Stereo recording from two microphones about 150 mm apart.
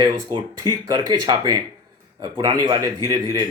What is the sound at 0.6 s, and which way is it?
A man's voice, 25° right (ahead or behind).